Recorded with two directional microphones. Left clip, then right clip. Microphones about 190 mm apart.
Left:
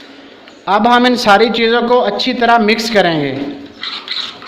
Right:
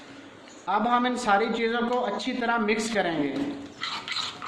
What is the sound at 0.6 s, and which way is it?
A man's voice, 55° left (ahead or behind).